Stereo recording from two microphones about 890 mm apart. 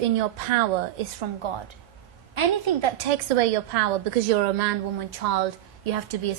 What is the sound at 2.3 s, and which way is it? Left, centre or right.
A woman's voice, right.